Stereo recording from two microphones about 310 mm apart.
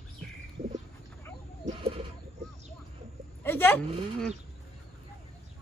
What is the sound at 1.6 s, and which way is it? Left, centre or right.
Chicken, centre.